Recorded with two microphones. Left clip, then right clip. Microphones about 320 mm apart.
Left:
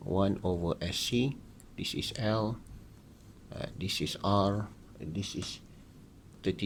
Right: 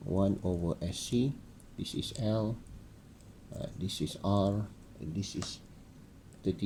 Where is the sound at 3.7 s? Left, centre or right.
Left.